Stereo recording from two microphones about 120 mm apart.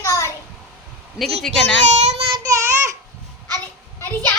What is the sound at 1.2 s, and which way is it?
Speech, centre (ahead or behind).